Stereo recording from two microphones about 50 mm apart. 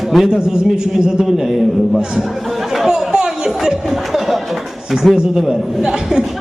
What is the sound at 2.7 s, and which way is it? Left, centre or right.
Chatter, centre.